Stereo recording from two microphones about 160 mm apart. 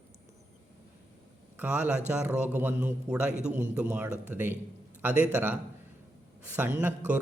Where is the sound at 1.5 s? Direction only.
10° right (ahead or behind).